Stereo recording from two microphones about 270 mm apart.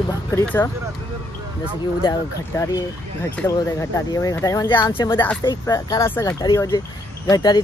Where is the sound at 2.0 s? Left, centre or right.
Centre.